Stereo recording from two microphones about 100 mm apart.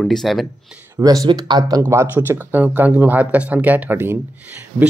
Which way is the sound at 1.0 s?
40° right (ahead or behind).